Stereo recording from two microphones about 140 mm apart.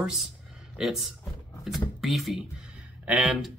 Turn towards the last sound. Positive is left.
turn(degrees=-5)  # may be behind; listen again after turning